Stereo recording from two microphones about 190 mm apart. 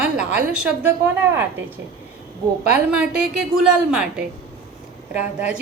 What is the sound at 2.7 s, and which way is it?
Speech, 5° right (ahead or behind).